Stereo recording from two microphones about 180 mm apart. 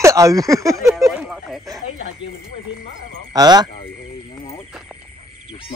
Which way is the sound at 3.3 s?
20° right (ahead or behind).